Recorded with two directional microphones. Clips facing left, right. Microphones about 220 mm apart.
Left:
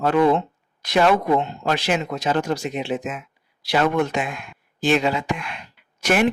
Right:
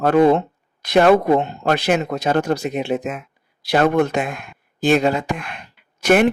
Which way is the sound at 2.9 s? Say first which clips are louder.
Right 3 dB; 40° right (ahead or behind).